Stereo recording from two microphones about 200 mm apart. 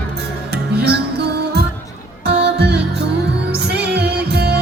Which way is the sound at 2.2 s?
55° right (ahead or behind).